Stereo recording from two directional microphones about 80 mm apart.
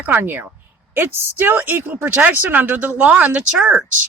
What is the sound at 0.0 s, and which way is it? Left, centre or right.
Speech, right.